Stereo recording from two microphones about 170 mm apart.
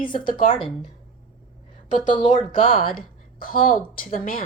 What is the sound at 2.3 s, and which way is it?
Speech, 30° left (ahead or behind).